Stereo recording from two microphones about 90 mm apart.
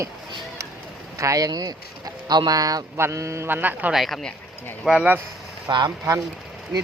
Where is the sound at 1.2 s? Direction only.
40° right (ahead or behind).